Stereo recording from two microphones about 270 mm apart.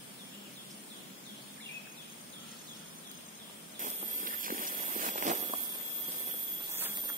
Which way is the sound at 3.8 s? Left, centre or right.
Right.